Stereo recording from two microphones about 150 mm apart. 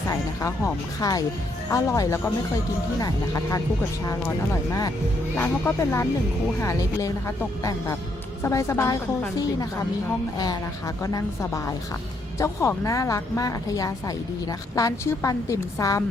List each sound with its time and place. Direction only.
0.1 s a woman's voice: 20° left (ahead or behind)
5.4 s a woman's voice: 15° left (ahead or behind)